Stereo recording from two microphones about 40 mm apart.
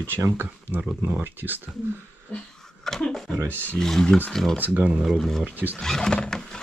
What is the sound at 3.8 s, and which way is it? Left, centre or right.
Speech, centre.